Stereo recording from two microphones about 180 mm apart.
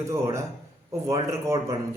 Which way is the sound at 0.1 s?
15° right (ahead or behind).